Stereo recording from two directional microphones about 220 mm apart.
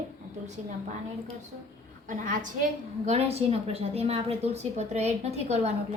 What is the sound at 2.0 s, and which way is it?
A woman's voice, 35° right (ahead or behind).